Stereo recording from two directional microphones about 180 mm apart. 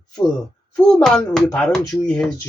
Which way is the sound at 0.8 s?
5° left (ahead or behind).